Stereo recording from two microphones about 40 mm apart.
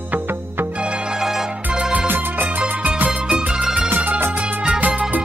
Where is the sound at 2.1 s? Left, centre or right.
Right.